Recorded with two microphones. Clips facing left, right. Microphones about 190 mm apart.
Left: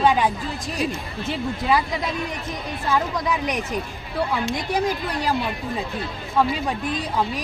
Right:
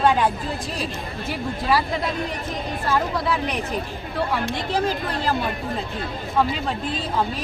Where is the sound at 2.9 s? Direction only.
15° left (ahead or behind).